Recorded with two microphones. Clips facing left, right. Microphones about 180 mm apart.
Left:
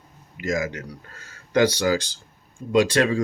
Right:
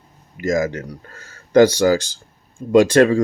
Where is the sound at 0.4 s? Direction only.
45° right (ahead or behind).